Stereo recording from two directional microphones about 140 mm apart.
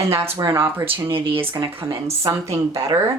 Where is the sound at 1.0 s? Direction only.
40° right (ahead or behind).